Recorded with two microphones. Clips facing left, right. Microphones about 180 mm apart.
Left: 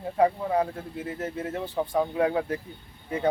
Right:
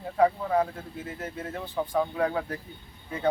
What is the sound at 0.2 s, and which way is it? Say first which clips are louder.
Speech: even; 25° left (ahead or behind).